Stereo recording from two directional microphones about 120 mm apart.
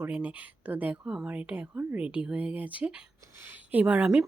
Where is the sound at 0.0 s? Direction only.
15° right (ahead or behind).